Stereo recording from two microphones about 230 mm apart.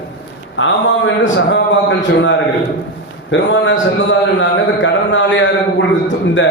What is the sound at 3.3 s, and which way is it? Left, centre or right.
A man's voice, left.